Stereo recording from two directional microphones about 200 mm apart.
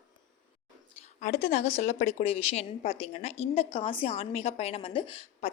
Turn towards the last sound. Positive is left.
turn(degrees=30)  # may be behind; listen again after turning